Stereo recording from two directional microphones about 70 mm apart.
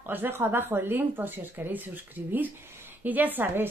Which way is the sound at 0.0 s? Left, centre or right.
Right.